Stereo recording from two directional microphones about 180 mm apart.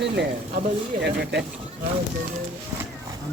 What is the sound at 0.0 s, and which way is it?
Speech, 70° right (ahead or behind).